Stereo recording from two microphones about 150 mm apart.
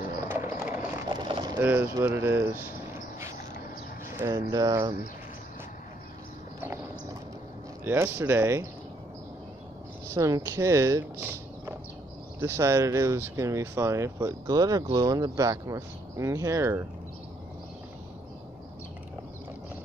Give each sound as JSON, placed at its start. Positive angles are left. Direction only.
{"t": 0.2, "sound": "a sound", "side_deg": -20}
{"t": 1.1, "sound": "a sound", "side_deg": -30}
{"t": 1.6, "sound": "speech", "side_deg": -15}
{"t": 4.3, "sound": "speech", "side_deg": -25}
{"t": 7.8, "sound": "speech", "side_deg": -15}
{"t": 10.0, "sound": "speech", "side_deg": -20}